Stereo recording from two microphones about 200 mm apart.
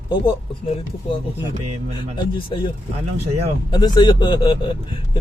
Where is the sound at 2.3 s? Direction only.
25° left (ahead or behind).